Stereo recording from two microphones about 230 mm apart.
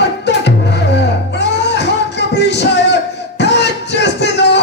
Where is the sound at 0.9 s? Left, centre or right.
Left.